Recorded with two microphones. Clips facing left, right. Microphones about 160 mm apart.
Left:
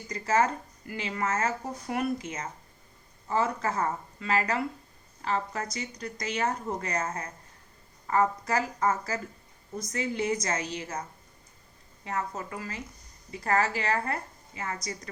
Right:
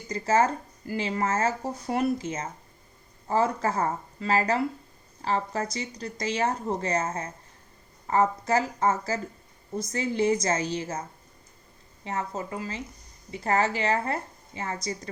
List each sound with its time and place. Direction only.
0.1 s speech: 30° right (ahead or behind)
12.0 s speech: 25° right (ahead or behind)